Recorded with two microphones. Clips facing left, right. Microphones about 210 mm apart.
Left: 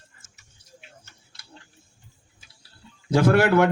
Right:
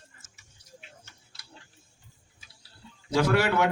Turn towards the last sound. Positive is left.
turn(degrees=55)  # may be behind; listen again after turning